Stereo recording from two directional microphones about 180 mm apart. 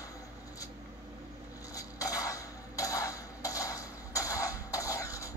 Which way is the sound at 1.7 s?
20° left (ahead or behind).